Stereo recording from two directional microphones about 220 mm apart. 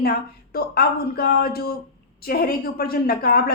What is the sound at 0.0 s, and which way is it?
Speech, 45° left (ahead or behind).